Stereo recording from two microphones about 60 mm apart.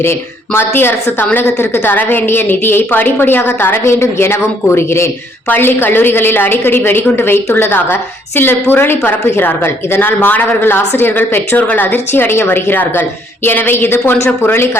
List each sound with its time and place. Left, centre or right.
0.0 s a woman's voice: left